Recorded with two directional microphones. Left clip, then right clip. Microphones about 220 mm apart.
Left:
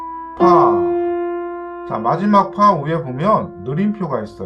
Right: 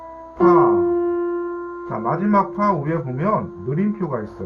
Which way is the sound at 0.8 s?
45° left (ahead or behind).